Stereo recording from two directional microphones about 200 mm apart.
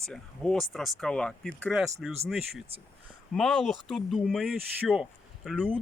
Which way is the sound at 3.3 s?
Centre (ahead or behind).